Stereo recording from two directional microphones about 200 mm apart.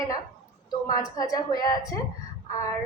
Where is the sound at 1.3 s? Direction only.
20° left (ahead or behind).